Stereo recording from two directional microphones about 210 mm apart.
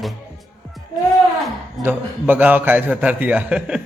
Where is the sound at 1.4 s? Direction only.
10° right (ahead or behind).